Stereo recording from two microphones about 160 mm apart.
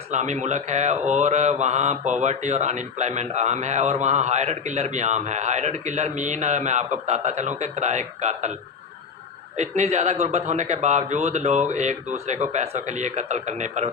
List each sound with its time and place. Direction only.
0.1 s a man's voice: 45° right (ahead or behind)
9.6 s a man's voice: 45° right (ahead or behind)